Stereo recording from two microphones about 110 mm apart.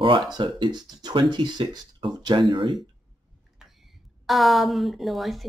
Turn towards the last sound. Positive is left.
turn(degrees=0)  # may be behind; listen again after turning